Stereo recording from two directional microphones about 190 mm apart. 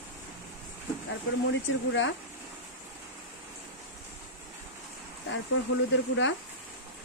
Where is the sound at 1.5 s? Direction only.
75° left (ahead or behind).